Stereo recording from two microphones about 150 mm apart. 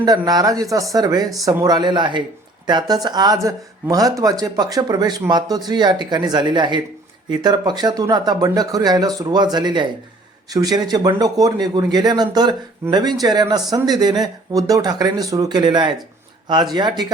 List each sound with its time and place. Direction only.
0.3 s speech: 25° right (ahead or behind)